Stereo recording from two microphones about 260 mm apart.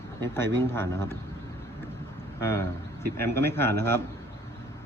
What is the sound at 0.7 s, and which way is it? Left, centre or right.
Speech, centre.